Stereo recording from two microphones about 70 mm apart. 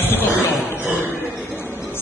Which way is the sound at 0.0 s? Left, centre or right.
Left.